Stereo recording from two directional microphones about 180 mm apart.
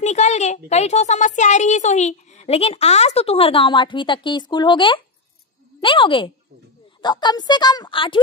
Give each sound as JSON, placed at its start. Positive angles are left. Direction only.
{"t": 0.0, "sound": "speech", "side_deg": 40}